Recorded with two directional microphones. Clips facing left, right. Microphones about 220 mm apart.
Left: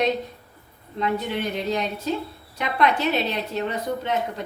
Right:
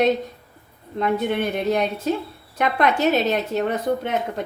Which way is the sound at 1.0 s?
55° right (ahead or behind).